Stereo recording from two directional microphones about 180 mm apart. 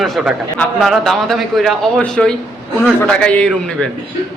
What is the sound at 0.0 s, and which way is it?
A man's voice, centre (ahead or behind).